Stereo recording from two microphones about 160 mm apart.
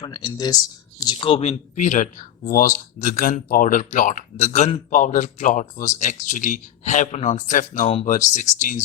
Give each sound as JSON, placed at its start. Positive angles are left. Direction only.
{"t": 0.0, "sound": "speech", "side_deg": 25}